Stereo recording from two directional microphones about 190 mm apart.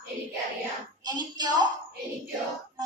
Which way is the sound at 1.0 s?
20° right (ahead or behind).